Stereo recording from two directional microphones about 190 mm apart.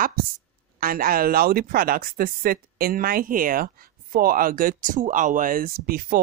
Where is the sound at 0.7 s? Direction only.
50° right (ahead or behind).